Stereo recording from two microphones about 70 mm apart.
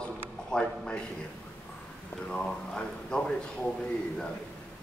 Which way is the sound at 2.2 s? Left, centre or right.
Centre.